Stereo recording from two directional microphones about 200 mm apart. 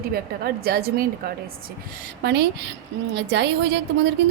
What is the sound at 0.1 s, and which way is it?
Speech, 50° right (ahead or behind).